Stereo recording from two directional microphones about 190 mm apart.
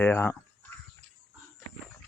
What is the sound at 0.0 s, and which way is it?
Speech, 10° left (ahead or behind).